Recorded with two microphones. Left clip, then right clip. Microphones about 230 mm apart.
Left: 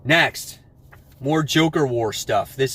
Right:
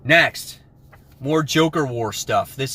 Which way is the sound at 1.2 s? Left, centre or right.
Centre.